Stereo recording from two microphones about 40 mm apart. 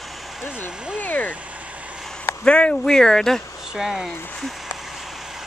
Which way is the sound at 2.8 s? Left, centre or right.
Centre.